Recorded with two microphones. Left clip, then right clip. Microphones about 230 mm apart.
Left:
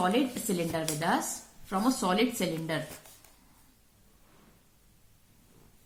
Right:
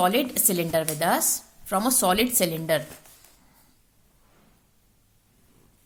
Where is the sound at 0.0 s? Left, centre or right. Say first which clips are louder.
Right 6 dB; right.